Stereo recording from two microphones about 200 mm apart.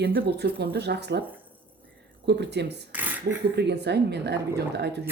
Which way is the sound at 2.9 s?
10° right (ahead or behind).